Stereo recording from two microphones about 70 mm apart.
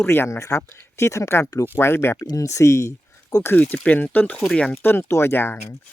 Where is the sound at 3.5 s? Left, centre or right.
Left.